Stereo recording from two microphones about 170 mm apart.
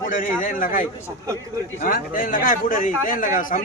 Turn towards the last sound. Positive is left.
turn(degrees=50)  # may be behind; listen again after turning